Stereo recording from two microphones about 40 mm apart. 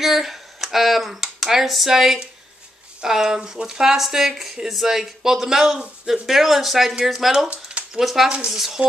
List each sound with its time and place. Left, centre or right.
0.0 s speech: centre
7.3 s speech: right
8.0 s speech: centre